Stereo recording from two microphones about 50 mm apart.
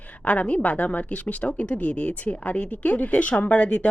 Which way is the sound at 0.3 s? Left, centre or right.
Left.